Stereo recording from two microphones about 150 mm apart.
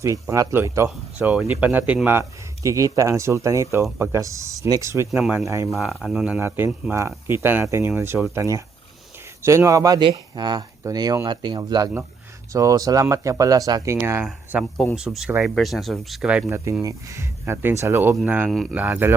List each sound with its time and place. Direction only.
0.0 s speech: 20° right (ahead or behind)
0.9 s speech: 10° right (ahead or behind)
5.6 s speech: centre (ahead or behind)
16.8 s speech: 20° right (ahead or behind)
18.4 s speech: centre (ahead or behind)
18.7 s speech: 10° right (ahead or behind)